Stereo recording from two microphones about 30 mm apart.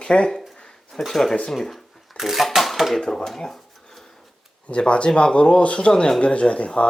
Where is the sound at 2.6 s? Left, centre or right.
Centre.